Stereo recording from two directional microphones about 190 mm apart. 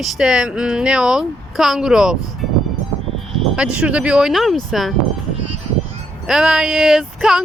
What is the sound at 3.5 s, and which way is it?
Speech, 5° right (ahead or behind).